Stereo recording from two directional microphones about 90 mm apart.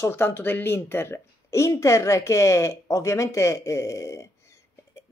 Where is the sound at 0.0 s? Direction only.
25° left (ahead or behind).